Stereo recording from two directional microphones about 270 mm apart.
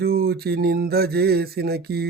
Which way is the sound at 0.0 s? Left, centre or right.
Right.